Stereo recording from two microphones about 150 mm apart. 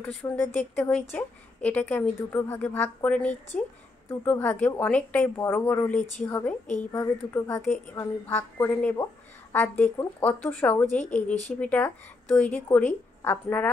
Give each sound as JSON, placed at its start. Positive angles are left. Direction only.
{"t": 0.0, "sound": "a woman's voice", "side_deg": 10}